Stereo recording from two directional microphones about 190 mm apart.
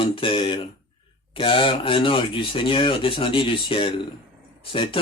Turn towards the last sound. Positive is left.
turn(degrees=30)  # may be behind; listen again after turning